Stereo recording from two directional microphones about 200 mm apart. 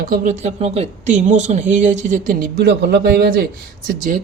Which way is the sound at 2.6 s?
60° right (ahead or behind).